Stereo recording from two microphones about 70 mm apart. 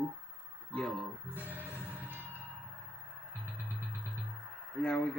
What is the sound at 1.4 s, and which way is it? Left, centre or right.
Music, right.